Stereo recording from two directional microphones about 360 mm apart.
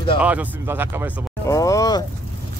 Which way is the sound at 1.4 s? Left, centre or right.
Centre.